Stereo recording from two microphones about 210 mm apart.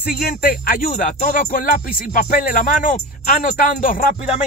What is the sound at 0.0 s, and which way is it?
Speech, 45° left (ahead or behind).